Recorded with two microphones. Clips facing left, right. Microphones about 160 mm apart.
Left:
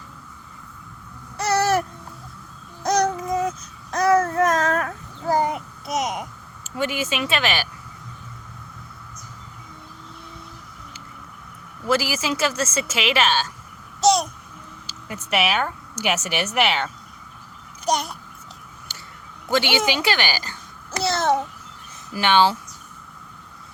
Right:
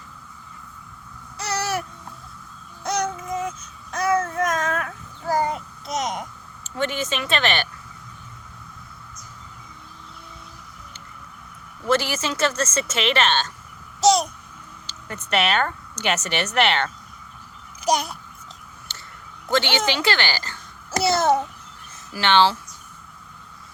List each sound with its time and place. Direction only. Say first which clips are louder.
1.4 s a sound: left 6 dB; 45° left (ahead or behind)
2.8 s babbling: left 5 dB; 40° left (ahead or behind)
5.3 s child singing: left 1 dB; 15° left (ahead or behind)
6.7 s speech: left 1 dB; 10° left (ahead or behind)
11.9 s speech: even; 5° left (ahead or behind)
14.8 s speech: even; 5° left (ahead or behind)
17.8 s babbling: right 1 dB; centre (ahead or behind)
19.5 s a woman's voice: left 1 dB; 10° left (ahead or behind)
21.0 s a child's voice: right 2 dB; 5° right (ahead or behind)
22.1 s speech: even; 15° left (ahead or behind)